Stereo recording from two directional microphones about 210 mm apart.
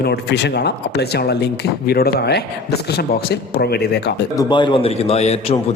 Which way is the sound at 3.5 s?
50° left (ahead or behind).